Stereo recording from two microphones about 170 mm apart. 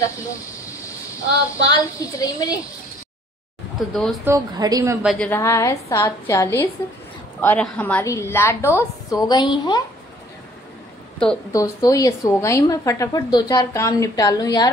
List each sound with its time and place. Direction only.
0.0 s speech: 20° left (ahead or behind)
3.9 s speech: centre (ahead or behind)
4.2 s speech: 15° right (ahead or behind)
5.3 s a woman's voice: 15° left (ahead or behind)
11.5 s a woman's voice: 20° left (ahead or behind)